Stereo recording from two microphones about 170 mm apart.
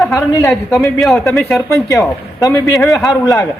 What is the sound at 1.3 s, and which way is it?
Speech, 15° left (ahead or behind).